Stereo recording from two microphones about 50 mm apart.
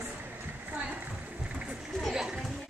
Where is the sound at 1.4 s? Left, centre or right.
Right.